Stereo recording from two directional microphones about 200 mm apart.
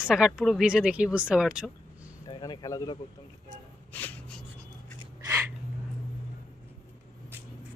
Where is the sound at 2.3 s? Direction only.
20° left (ahead or behind).